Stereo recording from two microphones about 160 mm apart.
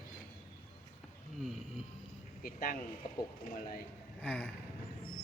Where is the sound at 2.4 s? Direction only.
60° left (ahead or behind).